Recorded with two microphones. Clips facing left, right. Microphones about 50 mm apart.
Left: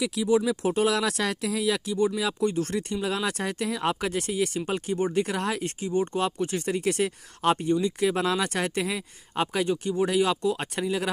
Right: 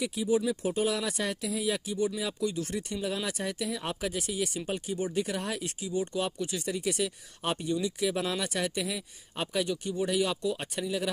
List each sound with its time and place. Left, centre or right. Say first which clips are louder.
0.0 s speech: left 4 dB; left
0.7 s speech: left 5 dB; left
5.8 s speech: left 5 dB; left
8.1 s speech: left 5 dB; left